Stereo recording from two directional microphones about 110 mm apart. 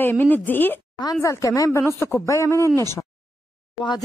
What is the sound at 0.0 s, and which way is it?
Speech, 15° left (ahead or behind).